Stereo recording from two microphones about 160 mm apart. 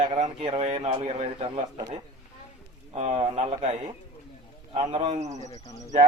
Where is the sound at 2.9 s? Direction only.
45° right (ahead or behind).